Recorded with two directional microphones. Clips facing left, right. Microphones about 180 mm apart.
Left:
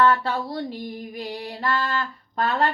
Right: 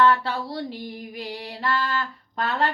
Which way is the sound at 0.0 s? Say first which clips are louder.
Even; 45° left (ahead or behind).